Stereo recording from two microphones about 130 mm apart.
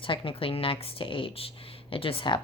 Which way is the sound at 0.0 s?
40° left (ahead or behind).